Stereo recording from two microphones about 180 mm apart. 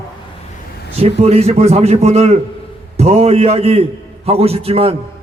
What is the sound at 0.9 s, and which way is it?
A man's voice, 35° right (ahead or behind).